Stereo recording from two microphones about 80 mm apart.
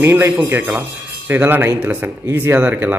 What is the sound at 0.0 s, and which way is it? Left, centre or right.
A man's voice, right.